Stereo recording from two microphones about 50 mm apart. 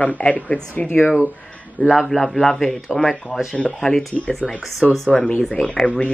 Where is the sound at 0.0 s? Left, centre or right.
Left.